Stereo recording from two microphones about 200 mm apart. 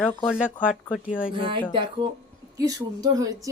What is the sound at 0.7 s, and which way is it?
Speech, 5° right (ahead or behind).